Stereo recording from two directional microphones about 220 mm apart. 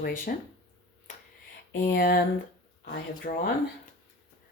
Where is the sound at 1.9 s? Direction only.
50° left (ahead or behind).